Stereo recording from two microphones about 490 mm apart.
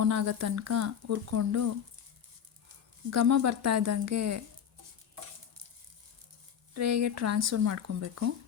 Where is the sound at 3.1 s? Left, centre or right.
Right.